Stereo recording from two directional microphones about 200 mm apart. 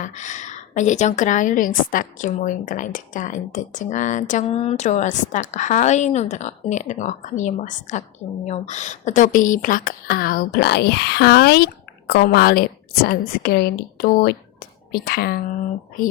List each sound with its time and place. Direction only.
0.0 s a woman's voice: 40° left (ahead or behind)